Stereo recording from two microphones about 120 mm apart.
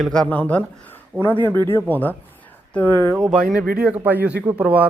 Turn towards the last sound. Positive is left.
turn(degrees=-10)  # may be behind; listen again after turning